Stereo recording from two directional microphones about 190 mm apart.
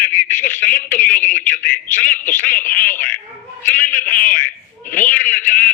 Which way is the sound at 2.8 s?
45° left (ahead or behind).